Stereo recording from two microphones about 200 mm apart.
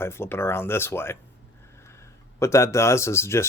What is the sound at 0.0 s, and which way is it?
Speech, 10° left (ahead or behind).